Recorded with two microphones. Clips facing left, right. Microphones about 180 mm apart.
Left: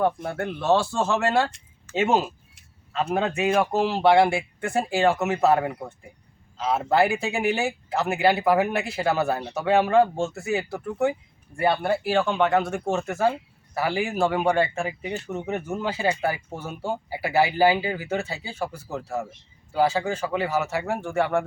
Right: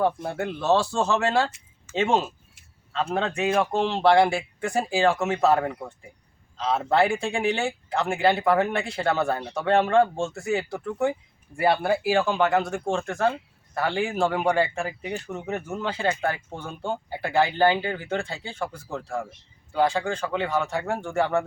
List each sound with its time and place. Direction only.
0.0 s speech: centre (ahead or behind)